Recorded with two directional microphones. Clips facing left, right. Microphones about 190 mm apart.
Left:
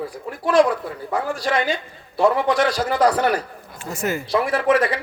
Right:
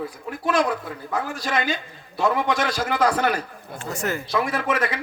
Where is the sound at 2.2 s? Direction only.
35° left (ahead or behind).